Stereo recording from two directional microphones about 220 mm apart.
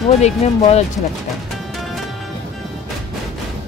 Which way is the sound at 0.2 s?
30° left (ahead or behind).